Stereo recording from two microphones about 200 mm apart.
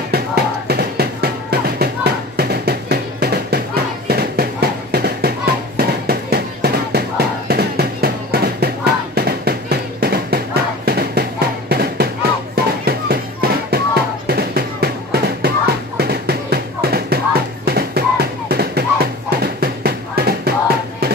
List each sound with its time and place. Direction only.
0.1 s music: 50° right (ahead or behind)
4.1 s a sound: 50° right (ahead or behind)
19.3 s music: 50° right (ahead or behind)